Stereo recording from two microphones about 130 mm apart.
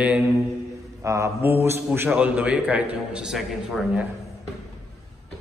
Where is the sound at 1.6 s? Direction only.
20° right (ahead or behind); by 3.8 s 5° right (ahead or behind).